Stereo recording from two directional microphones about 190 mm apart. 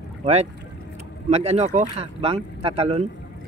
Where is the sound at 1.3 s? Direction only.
35° right (ahead or behind).